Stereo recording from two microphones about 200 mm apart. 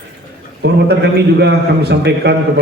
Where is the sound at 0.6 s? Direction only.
55° right (ahead or behind).